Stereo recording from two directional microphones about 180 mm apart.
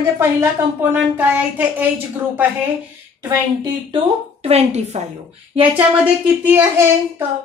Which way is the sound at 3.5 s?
30° right (ahead or behind).